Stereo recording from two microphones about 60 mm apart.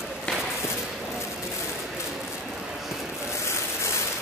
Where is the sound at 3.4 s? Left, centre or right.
Left.